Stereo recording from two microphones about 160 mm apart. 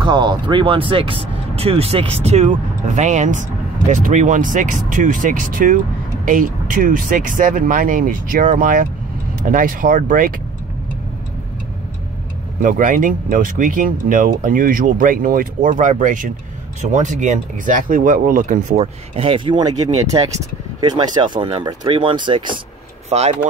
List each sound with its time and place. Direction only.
0.0 s speech: 30° right (ahead or behind); by 10.3 s 55° right (ahead or behind)
12.6 s speech: 55° right (ahead or behind)
18.8 s speech: 35° right (ahead or behind)
20.8 s speech: 25° right (ahead or behind)
23.0 s speech: 40° right (ahead or behind)